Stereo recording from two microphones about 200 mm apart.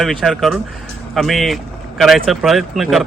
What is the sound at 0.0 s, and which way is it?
Speech, centre (ahead or behind).